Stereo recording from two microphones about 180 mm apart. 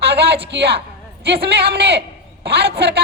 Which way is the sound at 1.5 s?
65° right (ahead or behind).